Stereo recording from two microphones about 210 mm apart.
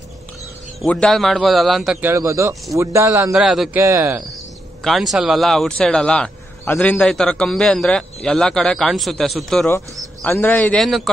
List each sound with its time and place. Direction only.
0.8 s speech: 5° left (ahead or behind); by 3.3 s 15° right (ahead or behind)
3.3 s speech: centre (ahead or behind)
4.8 s a man's voice: centre (ahead or behind)